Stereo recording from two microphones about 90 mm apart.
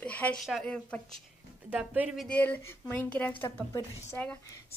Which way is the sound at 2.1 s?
10° left (ahead or behind).